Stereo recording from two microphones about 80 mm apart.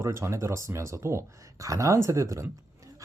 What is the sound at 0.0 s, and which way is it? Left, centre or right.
Speech, right.